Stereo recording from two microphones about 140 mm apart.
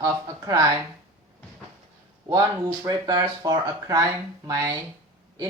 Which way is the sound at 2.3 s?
25° right (ahead or behind).